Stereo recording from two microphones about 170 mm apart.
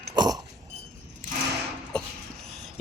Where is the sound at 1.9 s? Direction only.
5° left (ahead or behind).